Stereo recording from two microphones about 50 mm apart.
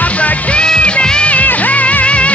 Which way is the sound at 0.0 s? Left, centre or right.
Left.